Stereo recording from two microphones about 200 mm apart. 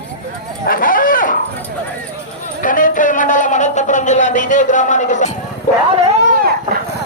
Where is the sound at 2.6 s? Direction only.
40° left (ahead or behind).